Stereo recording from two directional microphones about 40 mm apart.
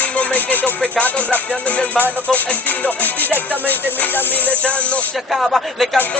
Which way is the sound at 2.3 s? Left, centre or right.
Left.